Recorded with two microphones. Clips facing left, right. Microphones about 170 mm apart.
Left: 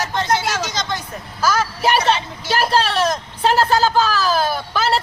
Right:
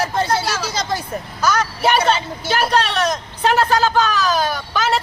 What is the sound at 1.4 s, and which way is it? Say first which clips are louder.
A woman's voice: even; 5° left (ahead or behind).